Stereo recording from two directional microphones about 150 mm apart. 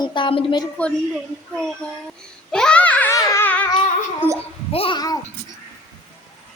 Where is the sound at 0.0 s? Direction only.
30° left (ahead or behind).